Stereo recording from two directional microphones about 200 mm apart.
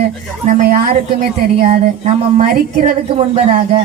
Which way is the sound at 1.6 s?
35° right (ahead or behind).